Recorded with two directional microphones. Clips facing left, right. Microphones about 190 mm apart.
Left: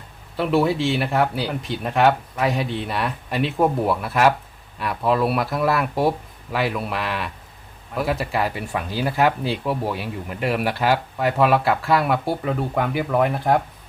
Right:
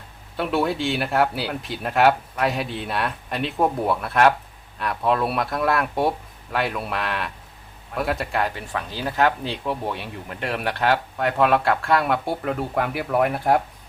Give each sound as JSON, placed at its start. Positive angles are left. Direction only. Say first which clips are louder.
{"t": 0.3, "sound": "speech", "louder": "left 3 dB", "side_deg": 0}